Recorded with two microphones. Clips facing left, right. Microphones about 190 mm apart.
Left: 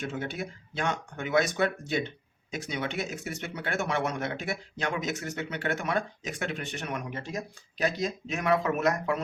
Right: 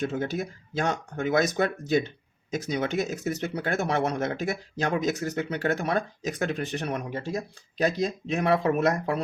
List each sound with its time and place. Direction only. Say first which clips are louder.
0.0 s speech: right 5 dB; 40° right (ahead or behind)